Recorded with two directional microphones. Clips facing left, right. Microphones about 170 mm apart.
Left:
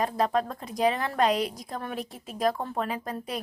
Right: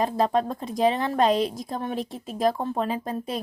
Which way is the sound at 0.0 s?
25° right (ahead or behind).